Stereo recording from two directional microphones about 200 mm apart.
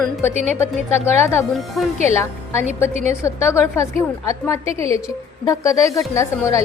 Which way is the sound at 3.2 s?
15° left (ahead or behind).